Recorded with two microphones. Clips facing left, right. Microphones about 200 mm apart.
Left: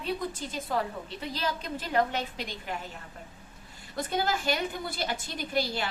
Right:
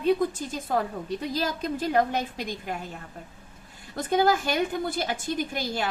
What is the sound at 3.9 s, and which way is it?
A woman's voice, 50° right (ahead or behind).